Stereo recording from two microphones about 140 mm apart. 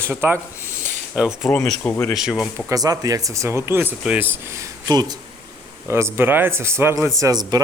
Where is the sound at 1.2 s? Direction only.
5° right (ahead or behind).